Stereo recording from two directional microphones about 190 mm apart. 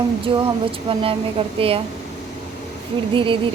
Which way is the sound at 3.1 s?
25° right (ahead or behind).